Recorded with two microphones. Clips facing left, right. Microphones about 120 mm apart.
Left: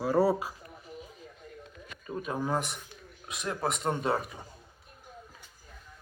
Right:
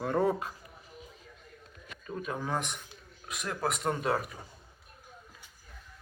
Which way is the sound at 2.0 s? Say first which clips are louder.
Left 3 dB; 5° left (ahead or behind).